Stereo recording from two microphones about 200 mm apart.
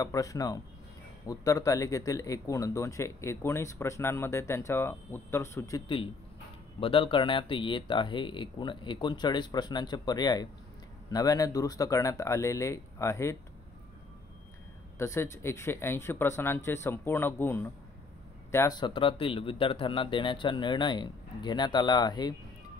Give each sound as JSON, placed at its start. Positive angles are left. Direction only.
{"t": 0.0, "sound": "speech", "side_deg": 15}
{"t": 6.8, "sound": "speech", "side_deg": 25}
{"t": 15.0, "sound": "speech", "side_deg": 15}